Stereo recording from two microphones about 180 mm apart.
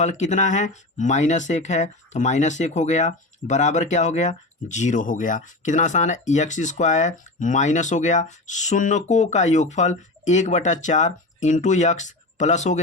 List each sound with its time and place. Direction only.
0.0 s speech: 40° left (ahead or behind)